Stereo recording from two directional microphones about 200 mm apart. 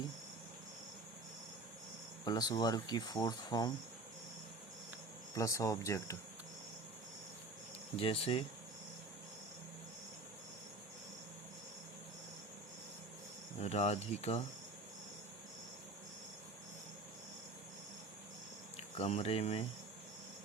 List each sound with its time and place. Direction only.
2.2 s speech: 20° left (ahead or behind)
5.3 s speech: 15° left (ahead or behind)
7.9 s speech: 30° left (ahead or behind)
13.6 s speech: 30° left (ahead or behind)
18.9 s speech: 30° left (ahead or behind)